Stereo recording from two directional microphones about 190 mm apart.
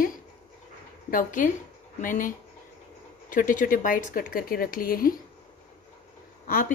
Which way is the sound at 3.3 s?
45° left (ahead or behind).